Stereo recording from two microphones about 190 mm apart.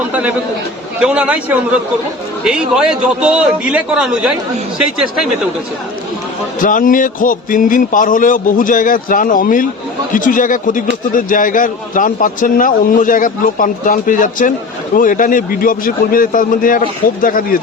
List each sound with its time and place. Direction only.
1.0 s a man's voice: 5° right (ahead or behind)
6.6 s a man's voice: 45° left (ahead or behind)